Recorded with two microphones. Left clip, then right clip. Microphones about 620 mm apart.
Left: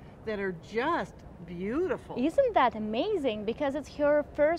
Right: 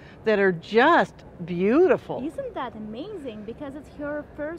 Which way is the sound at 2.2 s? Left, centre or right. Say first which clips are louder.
Left 7 dB; left.